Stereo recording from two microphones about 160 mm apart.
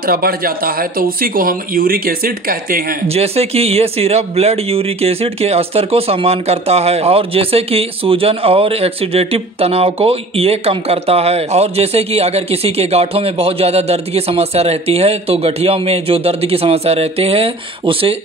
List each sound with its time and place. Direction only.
0.0 s speech: 70° right (ahead or behind)
3.1 s speech: 40° right (ahead or behind)